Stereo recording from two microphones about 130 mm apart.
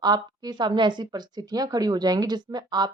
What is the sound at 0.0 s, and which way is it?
Speech, 30° right (ahead or behind).